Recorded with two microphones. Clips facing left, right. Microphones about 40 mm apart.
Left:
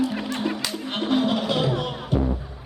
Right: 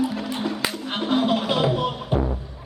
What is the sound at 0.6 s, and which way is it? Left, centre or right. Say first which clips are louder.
Music: right 3 dB; right.